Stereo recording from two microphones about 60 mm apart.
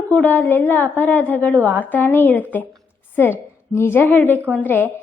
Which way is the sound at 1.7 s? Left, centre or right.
Left.